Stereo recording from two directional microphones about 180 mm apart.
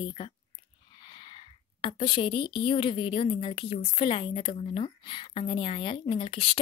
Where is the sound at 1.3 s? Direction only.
25° left (ahead or behind).